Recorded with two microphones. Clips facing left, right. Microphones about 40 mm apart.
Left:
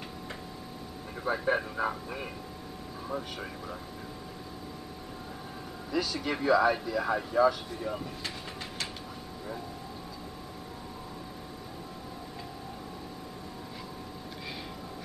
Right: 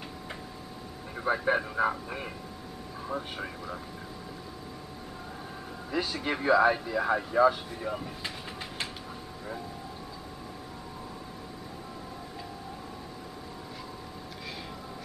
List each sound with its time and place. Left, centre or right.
1.1 s speech: centre
5.9 s speech: right